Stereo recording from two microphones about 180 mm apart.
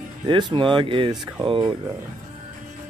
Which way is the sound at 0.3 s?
25° right (ahead or behind).